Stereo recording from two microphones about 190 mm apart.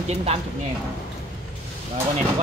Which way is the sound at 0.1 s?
30° right (ahead or behind).